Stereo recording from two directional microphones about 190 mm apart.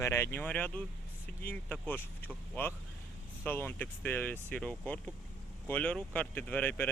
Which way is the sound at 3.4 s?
10° left (ahead or behind).